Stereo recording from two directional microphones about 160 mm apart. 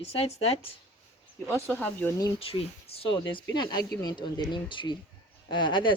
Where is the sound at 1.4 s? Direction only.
15° right (ahead or behind).